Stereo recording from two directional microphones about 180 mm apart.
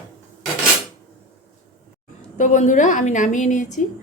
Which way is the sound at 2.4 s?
45° left (ahead or behind).